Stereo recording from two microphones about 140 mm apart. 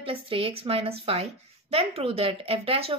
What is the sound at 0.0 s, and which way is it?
A woman's voice, 40° right (ahead or behind).